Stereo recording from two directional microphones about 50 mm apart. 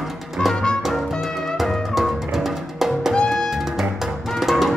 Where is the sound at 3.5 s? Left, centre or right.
Centre.